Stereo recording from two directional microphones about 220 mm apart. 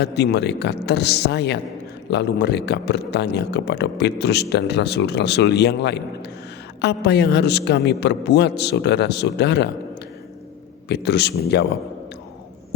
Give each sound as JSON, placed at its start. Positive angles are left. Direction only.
{"t": 0.0, "sound": "speech", "side_deg": 50}
{"t": 10.8, "sound": "speech", "side_deg": 50}